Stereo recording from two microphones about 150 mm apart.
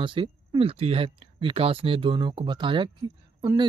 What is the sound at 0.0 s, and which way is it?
Speech, 35° right (ahead or behind).